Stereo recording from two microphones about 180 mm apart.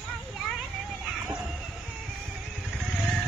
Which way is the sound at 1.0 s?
5° right (ahead or behind).